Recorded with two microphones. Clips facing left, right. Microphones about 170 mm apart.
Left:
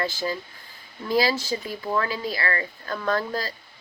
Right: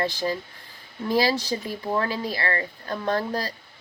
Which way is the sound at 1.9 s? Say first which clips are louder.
Even; 30° right (ahead or behind).